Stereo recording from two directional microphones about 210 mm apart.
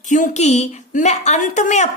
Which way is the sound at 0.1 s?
35° left (ahead or behind).